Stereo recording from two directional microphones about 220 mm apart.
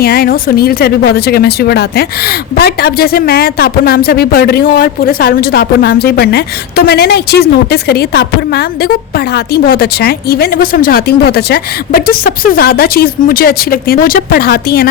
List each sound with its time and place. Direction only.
0.0 s speech: 45° left (ahead or behind)